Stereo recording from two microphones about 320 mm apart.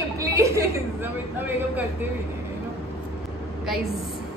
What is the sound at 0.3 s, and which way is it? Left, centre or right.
Speech, centre.